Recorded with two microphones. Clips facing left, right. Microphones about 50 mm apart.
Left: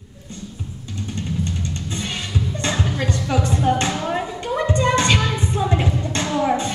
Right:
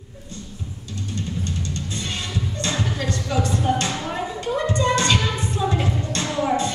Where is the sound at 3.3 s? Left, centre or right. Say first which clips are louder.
Left 2 dB; left.